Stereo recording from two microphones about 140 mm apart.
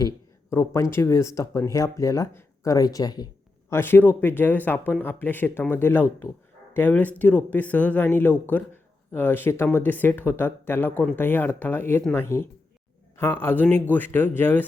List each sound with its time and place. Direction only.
0.5 s speech: 20° left (ahead or behind)
3.7 s speech: 15° left (ahead or behind)